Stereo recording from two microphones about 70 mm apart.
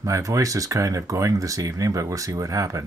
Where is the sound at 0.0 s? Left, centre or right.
Right.